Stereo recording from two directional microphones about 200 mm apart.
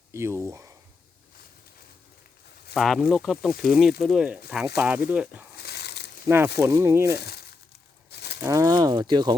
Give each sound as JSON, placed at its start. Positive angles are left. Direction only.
{"t": 0.1, "sound": "speech", "side_deg": -15}
{"t": 2.7, "sound": "speech", "side_deg": 0}
{"t": 5.5, "sound": "a sound", "side_deg": 55}
{"t": 6.2, "sound": "speech", "side_deg": -10}
{"t": 7.2, "sound": "speech", "side_deg": 50}
{"t": 8.1, "sound": "livestock", "side_deg": 55}
{"t": 8.4, "sound": "speech", "side_deg": -15}